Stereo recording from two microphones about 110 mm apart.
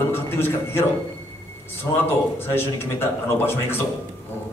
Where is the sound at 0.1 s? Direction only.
20° left (ahead or behind).